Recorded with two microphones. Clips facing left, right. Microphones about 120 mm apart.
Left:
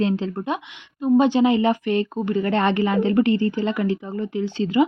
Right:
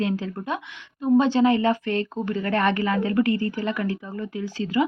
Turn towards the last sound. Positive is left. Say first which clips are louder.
# left 4 dB
turn(degrees=25)  # may be behind; listen again after turning